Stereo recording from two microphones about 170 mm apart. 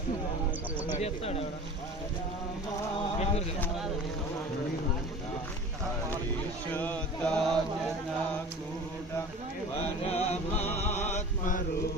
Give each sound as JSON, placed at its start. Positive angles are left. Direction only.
{"t": 0.9, "sound": "speech", "side_deg": 40}
{"t": 6.7, "sound": "chant", "side_deg": 10}
{"t": 10.0, "sound": "music", "side_deg": 35}